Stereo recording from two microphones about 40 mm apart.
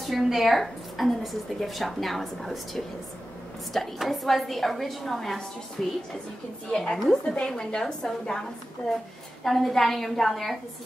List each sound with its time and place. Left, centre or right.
0.0 s a woman's voice: centre
5.8 s a woman's voice: centre